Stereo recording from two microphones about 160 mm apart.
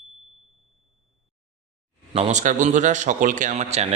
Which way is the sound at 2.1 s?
45° right (ahead or behind).